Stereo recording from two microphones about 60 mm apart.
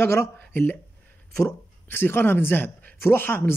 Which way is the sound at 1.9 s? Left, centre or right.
Left.